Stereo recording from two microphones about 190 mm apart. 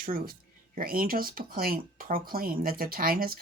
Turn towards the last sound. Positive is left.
turn(degrees=-50)  # may be behind; listen again after turning